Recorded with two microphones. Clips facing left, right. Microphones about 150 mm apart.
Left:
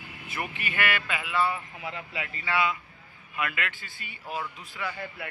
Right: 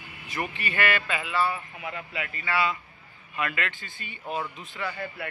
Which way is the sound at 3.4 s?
5° left (ahead or behind).